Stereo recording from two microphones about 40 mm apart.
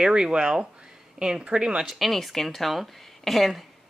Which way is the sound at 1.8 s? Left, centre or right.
Centre.